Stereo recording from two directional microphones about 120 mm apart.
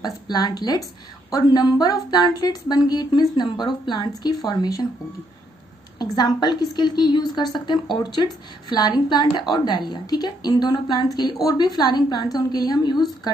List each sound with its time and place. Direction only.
0.0 s speech: 35° left (ahead or behind)
5.9 s speech: 35° left (ahead or behind)